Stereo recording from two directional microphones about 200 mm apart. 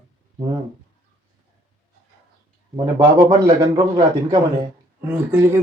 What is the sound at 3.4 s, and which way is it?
A man's voice, 20° right (ahead or behind).